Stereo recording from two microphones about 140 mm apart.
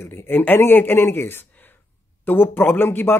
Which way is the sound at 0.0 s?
15° left (ahead or behind).